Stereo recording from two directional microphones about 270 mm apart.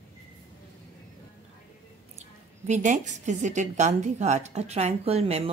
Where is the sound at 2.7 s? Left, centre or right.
Right.